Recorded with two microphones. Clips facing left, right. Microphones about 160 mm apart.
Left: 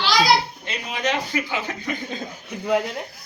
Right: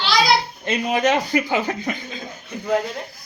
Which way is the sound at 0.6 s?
45° right (ahead or behind).